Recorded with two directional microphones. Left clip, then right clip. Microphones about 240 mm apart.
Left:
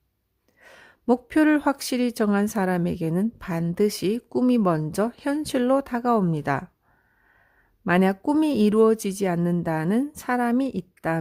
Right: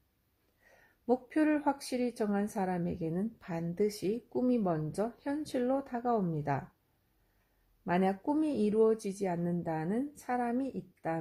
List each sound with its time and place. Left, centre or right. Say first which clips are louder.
0.6 s speech: left 12 dB; left
7.9 s speech: left 9 dB; left